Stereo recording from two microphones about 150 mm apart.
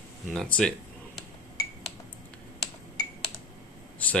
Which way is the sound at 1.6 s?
25° left (ahead or behind).